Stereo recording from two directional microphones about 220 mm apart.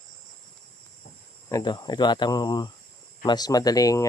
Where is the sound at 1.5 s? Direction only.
20° left (ahead or behind).